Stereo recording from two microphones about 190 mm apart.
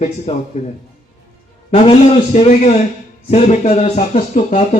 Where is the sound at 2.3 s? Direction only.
35° left (ahead or behind).